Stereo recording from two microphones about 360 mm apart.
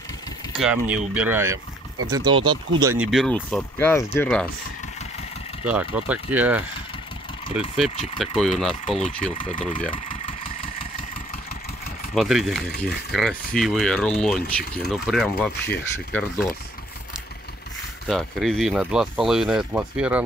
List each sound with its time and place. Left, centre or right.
0.6 s speech: centre
5.7 s speech: centre
7.7 s speech: centre
8.8 s speech: centre
12.2 s speech: centre
18.0 s speech: centre